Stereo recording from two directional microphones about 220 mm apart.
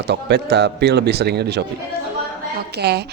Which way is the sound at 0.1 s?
50° right (ahead or behind).